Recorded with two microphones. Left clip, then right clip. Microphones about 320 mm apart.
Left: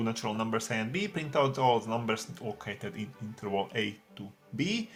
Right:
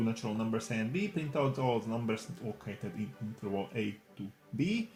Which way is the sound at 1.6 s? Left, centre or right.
Left.